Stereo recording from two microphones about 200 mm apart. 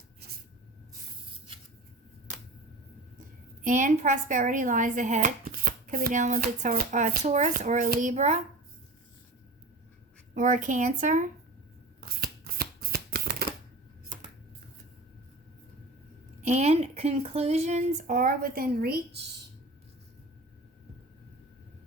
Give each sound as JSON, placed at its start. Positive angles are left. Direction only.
{"t": 3.2, "sound": "a woman's voice", "side_deg": -40}
{"t": 10.3, "sound": "a woman's voice", "side_deg": -40}
{"t": 11.9, "sound": "shuffling cards", "side_deg": -50}
{"t": 16.4, "sound": "a woman's voice", "side_deg": -35}